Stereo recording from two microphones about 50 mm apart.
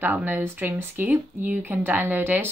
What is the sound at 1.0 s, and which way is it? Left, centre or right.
Speech, right.